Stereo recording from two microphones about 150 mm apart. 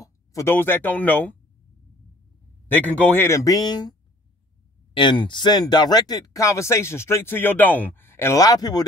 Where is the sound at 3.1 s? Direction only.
15° left (ahead or behind).